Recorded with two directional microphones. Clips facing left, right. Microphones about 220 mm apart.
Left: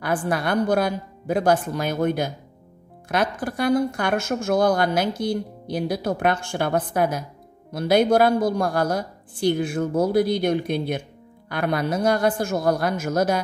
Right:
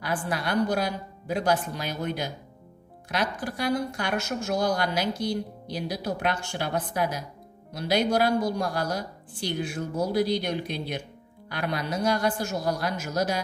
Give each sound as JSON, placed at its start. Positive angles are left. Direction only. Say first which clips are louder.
{"t": 0.0, "sound": "speech", "louder": "left 6 dB", "side_deg": 50}